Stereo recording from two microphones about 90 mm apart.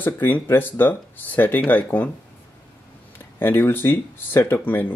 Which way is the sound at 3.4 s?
25° left (ahead or behind).